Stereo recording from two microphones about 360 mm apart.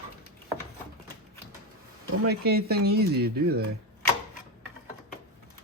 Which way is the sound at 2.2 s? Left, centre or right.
Right.